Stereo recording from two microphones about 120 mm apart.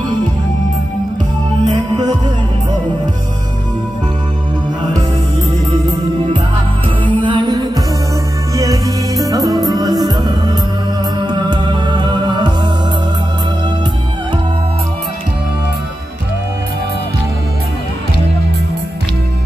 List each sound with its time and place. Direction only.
7.1 s music: 40° right (ahead or behind)